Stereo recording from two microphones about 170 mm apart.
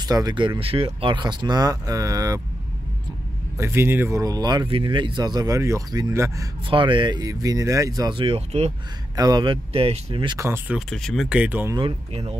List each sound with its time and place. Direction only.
0.0 s speech: 20° right (ahead or behind)
3.5 s speech: 15° right (ahead or behind)
6.7 s speech: 30° right (ahead or behind)
9.1 s speech: 25° right (ahead or behind)
10.9 s speech: 5° left (ahead or behind)
11.7 s speech: 30° right (ahead or behind)